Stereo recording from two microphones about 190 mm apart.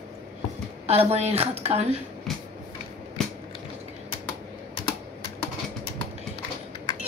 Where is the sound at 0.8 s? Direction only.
35° right (ahead or behind).